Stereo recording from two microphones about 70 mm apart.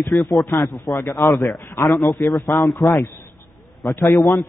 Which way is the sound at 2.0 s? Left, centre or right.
Left.